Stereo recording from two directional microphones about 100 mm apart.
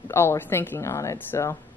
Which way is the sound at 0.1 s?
25° left (ahead or behind).